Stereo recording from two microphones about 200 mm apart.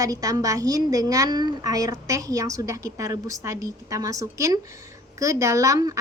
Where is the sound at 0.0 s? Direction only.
15° right (ahead or behind).